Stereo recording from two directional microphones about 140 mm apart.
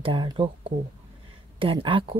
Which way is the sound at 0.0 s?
35° right (ahead or behind).